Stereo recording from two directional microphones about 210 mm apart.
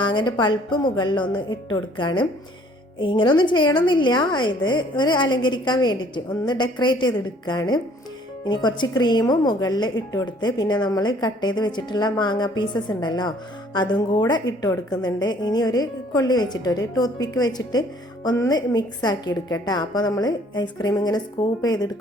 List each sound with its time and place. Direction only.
0.0 s a woman's voice: 20° left (ahead or behind)